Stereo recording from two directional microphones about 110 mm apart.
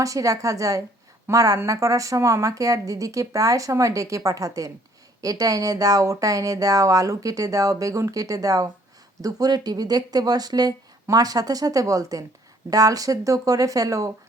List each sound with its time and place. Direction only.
0.0 s speech: 30° right (ahead or behind)